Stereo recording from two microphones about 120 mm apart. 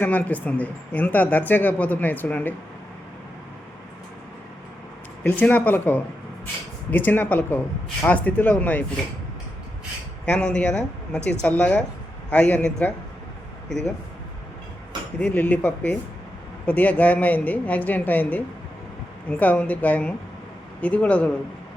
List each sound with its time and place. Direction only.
0.0 s speech: 15° left (ahead or behind)
5.2 s speech: 15° left (ahead or behind)
10.2 s speech: 10° left (ahead or behind)
15.2 s speech: 15° left (ahead or behind)